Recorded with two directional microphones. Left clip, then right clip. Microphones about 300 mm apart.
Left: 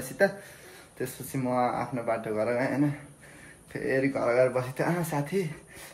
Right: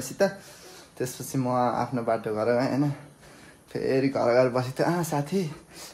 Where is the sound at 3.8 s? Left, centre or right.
Centre.